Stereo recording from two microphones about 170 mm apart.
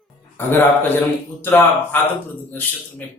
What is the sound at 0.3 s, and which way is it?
A man's voice, 10° left (ahead or behind).